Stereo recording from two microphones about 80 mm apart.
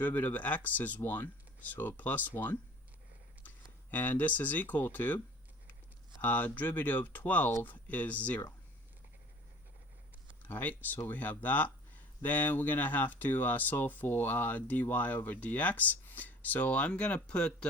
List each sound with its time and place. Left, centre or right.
0.0 s speech: left
3.9 s speech: left
6.2 s speech: left
10.4 s speech: left